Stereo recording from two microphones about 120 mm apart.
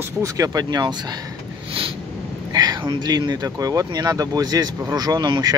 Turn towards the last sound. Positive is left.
turn(degrees=-35)  # may be behind; listen again after turning